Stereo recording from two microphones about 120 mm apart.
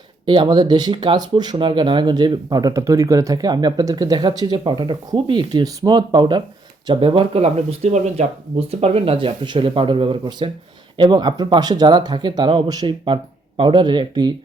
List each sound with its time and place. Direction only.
0.3 s speech: 35° right (ahead or behind); by 9.1 s 60° right (ahead or behind)
9.1 s speech: 45° right (ahead or behind)